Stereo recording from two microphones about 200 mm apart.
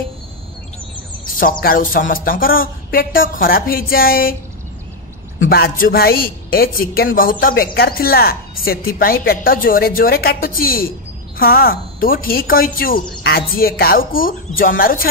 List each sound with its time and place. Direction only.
1.4 s a woman's voice: 45° left (ahead or behind)
5.5 s a woman's voice: 45° left (ahead or behind)